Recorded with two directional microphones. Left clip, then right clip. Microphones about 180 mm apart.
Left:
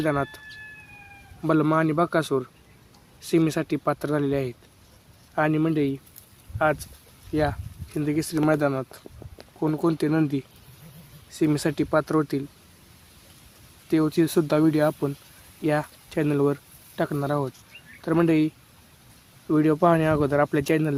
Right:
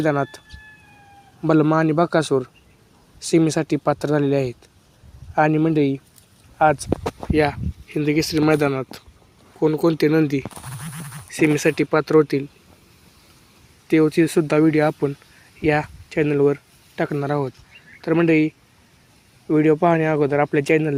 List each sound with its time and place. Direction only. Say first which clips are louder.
0.0 s speech: right 4 dB; 20° right (ahead or behind); by 12.4 s 5° right (ahead or behind)
13.8 s speech: right 6 dB; 5° right (ahead or behind)